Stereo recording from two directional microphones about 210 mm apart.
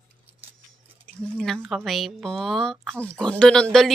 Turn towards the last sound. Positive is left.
turn(degrees=0)  # may be behind; listen again after turning